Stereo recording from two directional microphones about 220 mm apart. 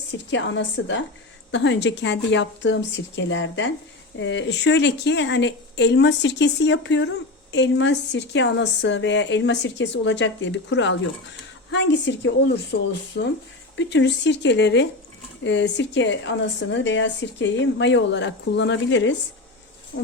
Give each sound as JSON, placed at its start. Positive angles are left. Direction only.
{"t": 0.3, "sound": "a woman's voice", "side_deg": 55}